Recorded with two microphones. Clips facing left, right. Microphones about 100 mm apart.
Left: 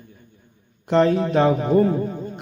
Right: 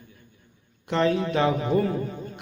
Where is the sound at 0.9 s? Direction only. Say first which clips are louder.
Left 5 dB; 40° left (ahead or behind).